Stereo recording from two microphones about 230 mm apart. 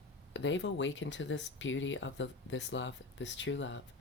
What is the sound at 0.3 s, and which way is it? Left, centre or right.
Speech, left.